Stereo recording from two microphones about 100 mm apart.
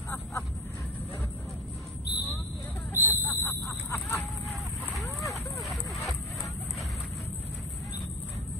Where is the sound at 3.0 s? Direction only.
25° left (ahead or behind).